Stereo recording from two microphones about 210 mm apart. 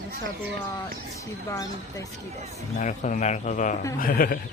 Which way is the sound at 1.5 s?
15° left (ahead or behind).